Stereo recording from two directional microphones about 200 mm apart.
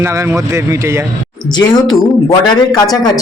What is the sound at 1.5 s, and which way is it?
Speech, 20° left (ahead or behind).